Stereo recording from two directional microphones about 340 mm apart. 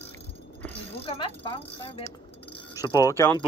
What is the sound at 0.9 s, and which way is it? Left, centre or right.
Speech, centre.